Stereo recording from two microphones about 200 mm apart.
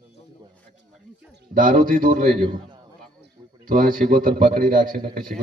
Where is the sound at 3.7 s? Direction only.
45° right (ahead or behind).